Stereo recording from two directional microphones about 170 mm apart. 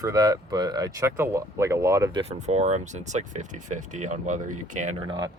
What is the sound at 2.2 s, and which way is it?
Speech, 40° right (ahead or behind).